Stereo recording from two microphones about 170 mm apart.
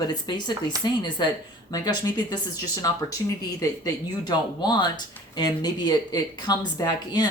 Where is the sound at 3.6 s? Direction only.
25° left (ahead or behind).